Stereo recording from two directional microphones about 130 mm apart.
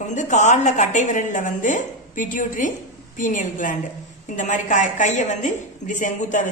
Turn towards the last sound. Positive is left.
turn(degrees=70)  # may be behind; listen again after turning